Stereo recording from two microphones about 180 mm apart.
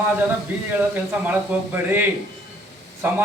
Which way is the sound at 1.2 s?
10° right (ahead or behind).